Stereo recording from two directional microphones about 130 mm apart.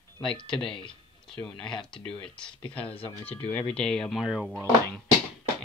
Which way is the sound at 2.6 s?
45° left (ahead or behind).